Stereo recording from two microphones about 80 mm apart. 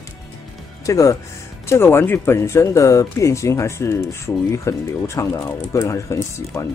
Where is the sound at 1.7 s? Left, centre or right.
Left.